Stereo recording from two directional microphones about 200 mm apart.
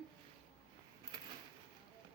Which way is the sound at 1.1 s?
20° right (ahead or behind).